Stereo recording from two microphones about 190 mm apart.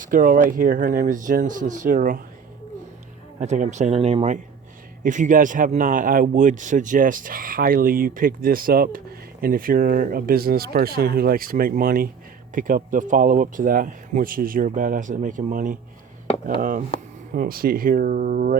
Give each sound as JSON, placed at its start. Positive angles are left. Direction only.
{"t": 0.0, "sound": "speech", "side_deg": -45}
{"t": 3.4, "sound": "speech", "side_deg": -40}